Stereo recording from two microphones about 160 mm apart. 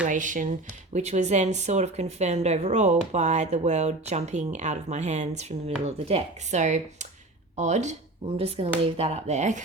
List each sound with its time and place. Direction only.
0.1 s speech: 55° right (ahead or behind)